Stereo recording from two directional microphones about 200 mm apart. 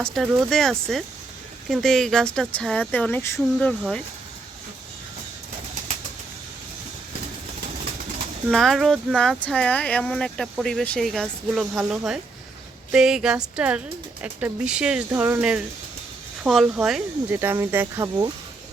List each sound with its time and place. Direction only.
0.0 s speech: centre (ahead or behind)
8.4 s speech: centre (ahead or behind); by 18.3 s 15° right (ahead or behind)